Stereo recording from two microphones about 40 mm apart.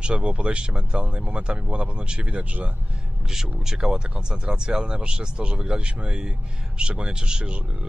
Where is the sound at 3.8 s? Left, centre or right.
Right.